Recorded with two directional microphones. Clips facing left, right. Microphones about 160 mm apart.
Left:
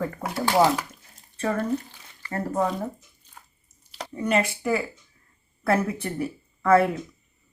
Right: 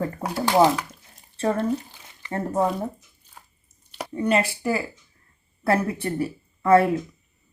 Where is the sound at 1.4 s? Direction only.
30° right (ahead or behind).